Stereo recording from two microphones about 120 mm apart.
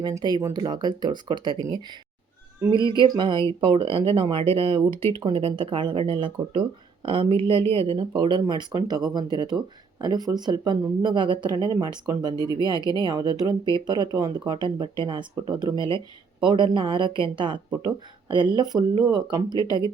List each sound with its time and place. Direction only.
0.0 s speech: 40° right (ahead or behind)
2.6 s speech: 40° right (ahead or behind)